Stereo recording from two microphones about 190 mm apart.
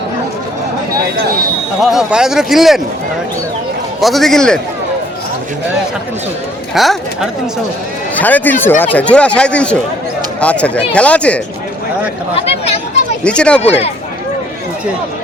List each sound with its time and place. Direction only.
1.8 s speech: centre (ahead or behind)
4.0 s speech: centre (ahead or behind)
6.7 s speech: centre (ahead or behind)
13.2 s speech: 5° left (ahead or behind)
13.6 s speech: 35° left (ahead or behind)